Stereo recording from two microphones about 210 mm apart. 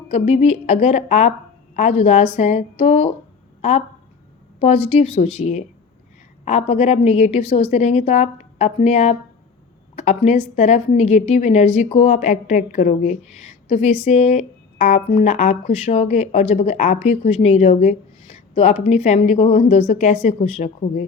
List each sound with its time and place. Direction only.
0.1 s speech: 30° left (ahead or behind)
6.4 s a woman's voice: 30° left (ahead or behind)